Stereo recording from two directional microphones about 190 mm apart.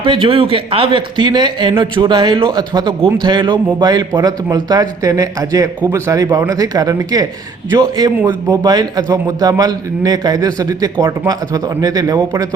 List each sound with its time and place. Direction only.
0.0 s a man's voice: 25° right (ahead or behind)